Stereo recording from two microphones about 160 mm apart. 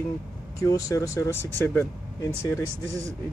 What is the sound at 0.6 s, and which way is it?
Speech, 20° left (ahead or behind).